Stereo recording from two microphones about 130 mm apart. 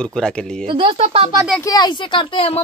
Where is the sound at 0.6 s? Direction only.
45° right (ahead or behind).